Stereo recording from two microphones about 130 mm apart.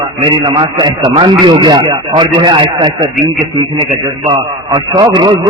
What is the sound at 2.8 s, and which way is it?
A man's voice, 35° right (ahead or behind).